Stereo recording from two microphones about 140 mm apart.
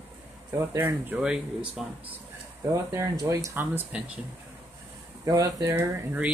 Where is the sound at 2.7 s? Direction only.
20° right (ahead or behind).